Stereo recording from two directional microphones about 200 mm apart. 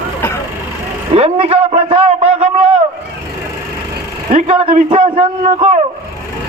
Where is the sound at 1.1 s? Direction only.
30° right (ahead or behind).